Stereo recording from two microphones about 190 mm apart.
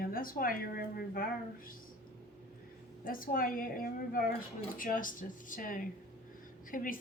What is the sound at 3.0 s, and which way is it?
A woman's voice, 45° left (ahead or behind).